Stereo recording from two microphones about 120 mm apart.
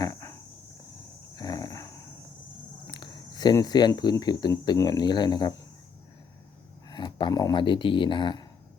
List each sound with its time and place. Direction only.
0.0 s cricket: 25° left (ahead or behind)
1.4 s dog: 35° left (ahead or behind)
2.9 s speech: 35° left (ahead or behind)
6.9 s speech: 40° left (ahead or behind)